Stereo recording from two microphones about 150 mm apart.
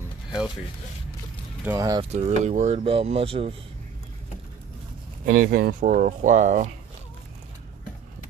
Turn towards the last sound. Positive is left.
turn(degrees=-55)  # may be behind; listen again after turning